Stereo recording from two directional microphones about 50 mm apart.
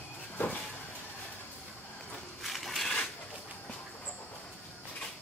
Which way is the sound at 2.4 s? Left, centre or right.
Centre.